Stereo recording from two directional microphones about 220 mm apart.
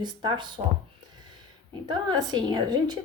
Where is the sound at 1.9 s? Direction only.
20° right (ahead or behind).